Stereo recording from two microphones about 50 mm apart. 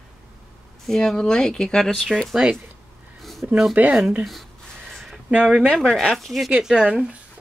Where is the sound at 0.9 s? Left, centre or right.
Centre.